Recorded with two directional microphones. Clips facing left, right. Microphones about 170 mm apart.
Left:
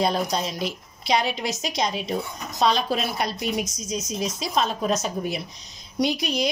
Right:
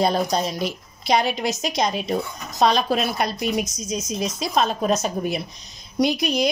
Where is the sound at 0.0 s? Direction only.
45° right (ahead or behind).